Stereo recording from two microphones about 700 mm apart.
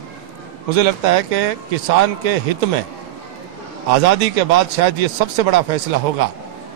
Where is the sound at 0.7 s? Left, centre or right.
Right.